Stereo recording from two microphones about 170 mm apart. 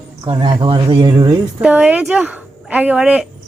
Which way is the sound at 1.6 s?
10° right (ahead or behind).